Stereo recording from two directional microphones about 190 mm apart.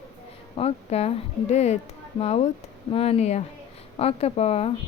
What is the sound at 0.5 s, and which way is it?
A woman's voice, 35° left (ahead or behind).